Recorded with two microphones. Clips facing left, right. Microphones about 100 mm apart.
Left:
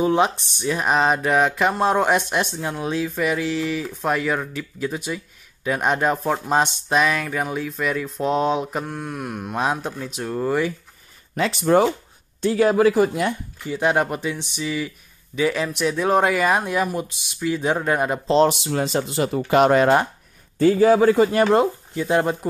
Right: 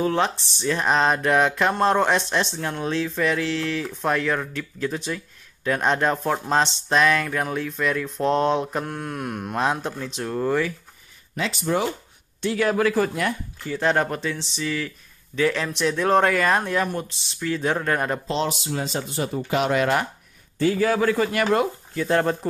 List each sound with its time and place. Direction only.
0.0 s speech: 15° left (ahead or behind)
11.3 s speech: 50° left (ahead or behind)
12.5 s speech: 25° left (ahead or behind); by 18.2 s 10° left (ahead or behind)
18.2 s speech: 35° left (ahead or behind)
18.5 s speech: 65° left (ahead or behind)
19.6 s speech: 40° left (ahead or behind)
22.0 s speech: 15° left (ahead or behind)